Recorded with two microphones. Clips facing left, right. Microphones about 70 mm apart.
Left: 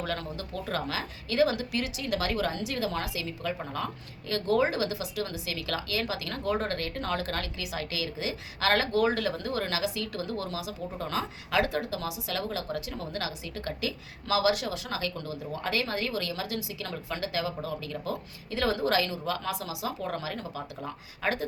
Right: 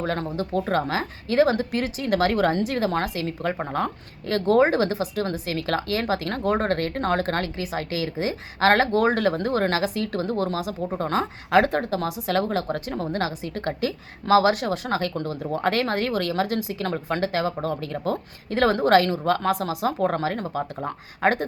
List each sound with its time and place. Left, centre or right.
0.0 s speech: right